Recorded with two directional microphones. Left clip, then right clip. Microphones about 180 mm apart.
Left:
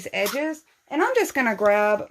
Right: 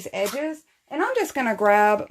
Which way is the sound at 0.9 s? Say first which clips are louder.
Left 2 dB; 25° left (ahead or behind).